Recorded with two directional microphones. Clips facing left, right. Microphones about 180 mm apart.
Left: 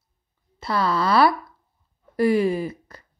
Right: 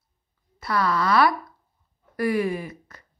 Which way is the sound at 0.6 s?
25° left (ahead or behind).